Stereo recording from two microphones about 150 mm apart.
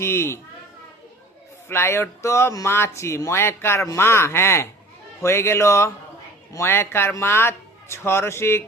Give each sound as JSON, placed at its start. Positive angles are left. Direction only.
{"t": 0.0, "sound": "speech", "side_deg": 15}
{"t": 1.6, "sound": "speech", "side_deg": 15}